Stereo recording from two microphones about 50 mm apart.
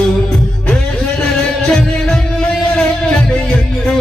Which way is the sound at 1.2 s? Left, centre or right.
Centre.